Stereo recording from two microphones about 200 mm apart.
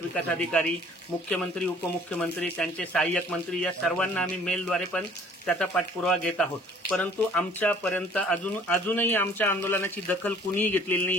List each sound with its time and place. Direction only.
0.1 s speech: 5° left (ahead or behind)
2.6 s speech: 5° left (ahead or behind)